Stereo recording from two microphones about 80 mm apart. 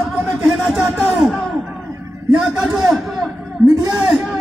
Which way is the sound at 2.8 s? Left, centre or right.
Centre.